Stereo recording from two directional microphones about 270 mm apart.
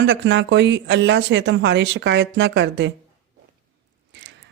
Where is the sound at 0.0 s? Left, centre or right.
Right.